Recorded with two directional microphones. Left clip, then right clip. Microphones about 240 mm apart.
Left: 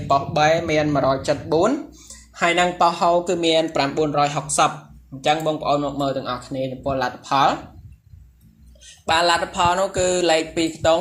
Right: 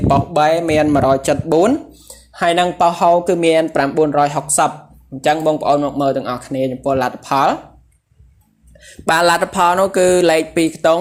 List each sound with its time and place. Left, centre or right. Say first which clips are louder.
0.1 s speech: right 3 dB; right
8.8 s speech: right 5 dB; right